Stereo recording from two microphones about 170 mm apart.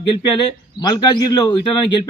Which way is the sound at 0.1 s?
25° left (ahead or behind).